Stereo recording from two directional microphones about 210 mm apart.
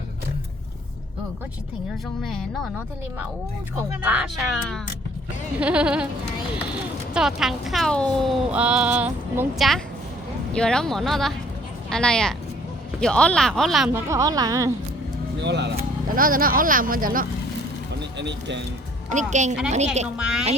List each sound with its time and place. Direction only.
4.0 s speech: 5° right (ahead or behind)
7.1 s speech: 5° right (ahead or behind)
14.1 s speech: 15° right (ahead or behind)
15.4 s speech: 55° right (ahead or behind)
15.8 s speech: 40° right (ahead or behind)
18.2 s speech: 55° right (ahead or behind)
19.1 s speech: 35° right (ahead or behind)
20.1 s speech: 5° right (ahead or behind)